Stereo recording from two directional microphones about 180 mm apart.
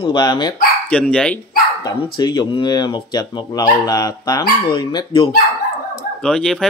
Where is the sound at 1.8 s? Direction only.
25° left (ahead or behind).